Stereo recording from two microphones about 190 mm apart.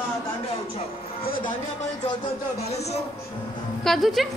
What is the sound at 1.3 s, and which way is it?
Speech, 45° left (ahead or behind).